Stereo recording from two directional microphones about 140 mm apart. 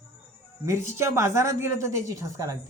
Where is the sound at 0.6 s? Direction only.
20° right (ahead or behind).